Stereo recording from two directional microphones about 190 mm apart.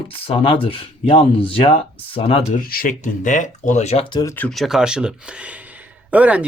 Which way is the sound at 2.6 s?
50° left (ahead or behind).